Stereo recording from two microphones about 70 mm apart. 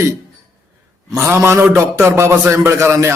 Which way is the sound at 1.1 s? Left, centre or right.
Right.